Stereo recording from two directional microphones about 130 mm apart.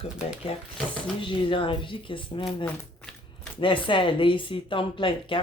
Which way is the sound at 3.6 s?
40° left (ahead or behind).